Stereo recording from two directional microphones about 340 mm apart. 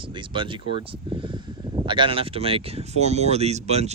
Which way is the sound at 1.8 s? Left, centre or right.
Centre.